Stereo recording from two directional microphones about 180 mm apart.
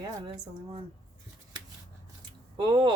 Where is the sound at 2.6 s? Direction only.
25° right (ahead or behind).